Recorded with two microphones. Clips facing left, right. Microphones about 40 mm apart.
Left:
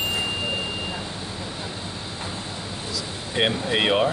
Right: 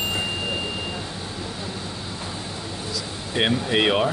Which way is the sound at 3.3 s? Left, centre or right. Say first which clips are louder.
Right 1 dB; centre.